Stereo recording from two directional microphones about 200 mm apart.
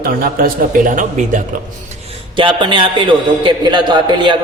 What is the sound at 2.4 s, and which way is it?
A man's voice, 25° right (ahead or behind).